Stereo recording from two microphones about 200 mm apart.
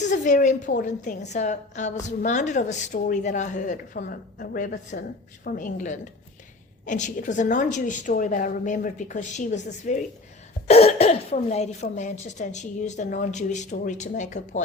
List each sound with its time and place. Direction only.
0.0 s a woman's voice: 40° left (ahead or behind)